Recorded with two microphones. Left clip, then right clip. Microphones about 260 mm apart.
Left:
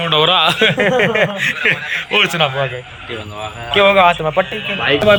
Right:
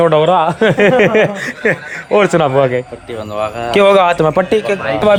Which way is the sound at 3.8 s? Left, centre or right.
Right.